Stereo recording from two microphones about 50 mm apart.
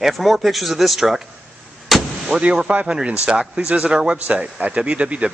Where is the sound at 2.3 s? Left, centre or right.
Centre.